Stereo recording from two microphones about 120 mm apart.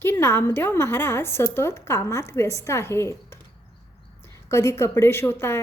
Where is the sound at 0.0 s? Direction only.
20° left (ahead or behind).